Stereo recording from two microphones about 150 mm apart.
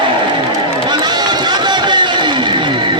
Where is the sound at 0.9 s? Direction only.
30° right (ahead or behind).